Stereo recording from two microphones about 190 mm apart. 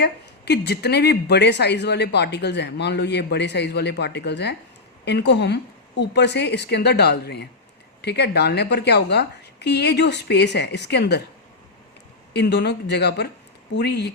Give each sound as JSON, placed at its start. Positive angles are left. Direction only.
{"t": 0.0, "sound": "a woman's voice", "side_deg": 60}
{"t": 12.3, "sound": "a woman's voice", "side_deg": 60}